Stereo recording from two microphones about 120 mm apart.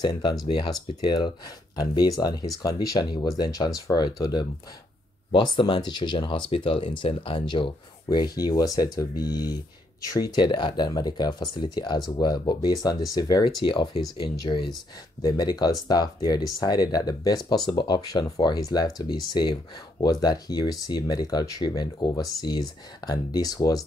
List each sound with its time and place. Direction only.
0.0 s speech: 35° left (ahead or behind)